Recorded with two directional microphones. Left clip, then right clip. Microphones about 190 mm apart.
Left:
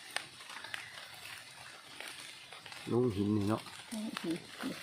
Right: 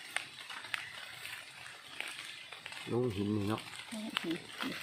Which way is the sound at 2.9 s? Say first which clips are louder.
Left 3 dB; 20° left (ahead or behind).